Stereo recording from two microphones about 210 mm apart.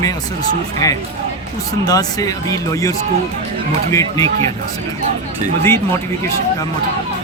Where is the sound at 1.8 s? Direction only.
15° left (ahead or behind).